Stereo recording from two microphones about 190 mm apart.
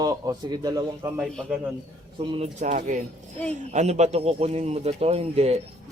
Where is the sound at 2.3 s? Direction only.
35° right (ahead or behind).